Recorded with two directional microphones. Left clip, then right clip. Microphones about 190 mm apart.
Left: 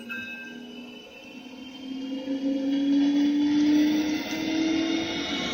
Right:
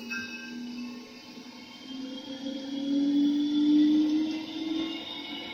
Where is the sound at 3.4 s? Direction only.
50° left (ahead or behind).